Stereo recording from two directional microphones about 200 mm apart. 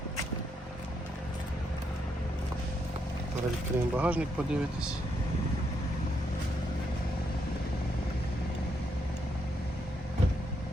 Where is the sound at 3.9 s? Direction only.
10° right (ahead or behind).